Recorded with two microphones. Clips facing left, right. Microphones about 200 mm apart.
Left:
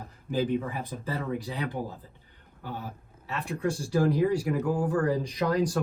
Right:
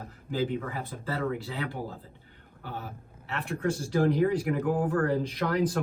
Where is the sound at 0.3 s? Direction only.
15° left (ahead or behind).